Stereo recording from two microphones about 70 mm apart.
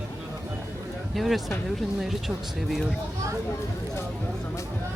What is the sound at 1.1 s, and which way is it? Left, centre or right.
Speech, centre.